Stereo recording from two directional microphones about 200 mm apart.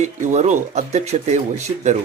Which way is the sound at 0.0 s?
35° right (ahead or behind).